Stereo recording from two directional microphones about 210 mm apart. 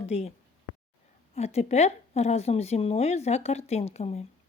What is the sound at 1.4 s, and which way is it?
A woman's voice, 30° left (ahead or behind).